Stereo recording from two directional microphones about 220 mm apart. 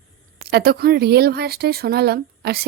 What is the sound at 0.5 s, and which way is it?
Speech, 45° right (ahead or behind).